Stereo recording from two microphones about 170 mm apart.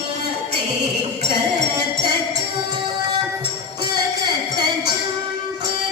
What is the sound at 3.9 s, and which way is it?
Music, 25° right (ahead or behind).